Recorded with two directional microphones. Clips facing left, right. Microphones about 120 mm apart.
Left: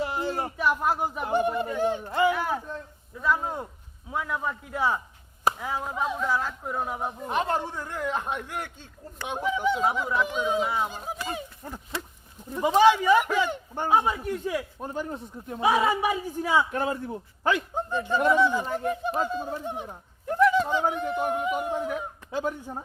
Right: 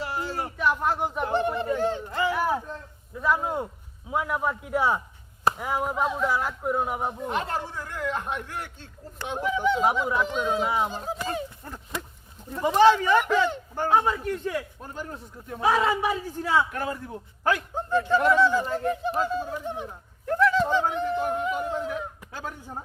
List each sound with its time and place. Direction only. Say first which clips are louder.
0.0 s a sound: left 2 dB; 20° left (ahead or behind)
0.5 s speech: right 2 dB; 5° left (ahead or behind); by 2.3 s 20° left (ahead or behind)
3.2 s speech: right 2 dB; 10° right (ahead or behind)
7.3 s speech: left 2 dB; 20° left (ahead or behind)
9.8 s speech: right 2 dB; 15° right (ahead or behind)
10.2 s speech: even; 10° left (ahead or behind)
16.7 s a man's voice: left 3 dB; 25° left (ahead or behind)
17.8 s speech: right 3 dB; 15° left (ahead or behind)